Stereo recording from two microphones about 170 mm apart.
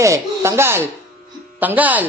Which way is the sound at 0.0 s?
15° right (ahead or behind).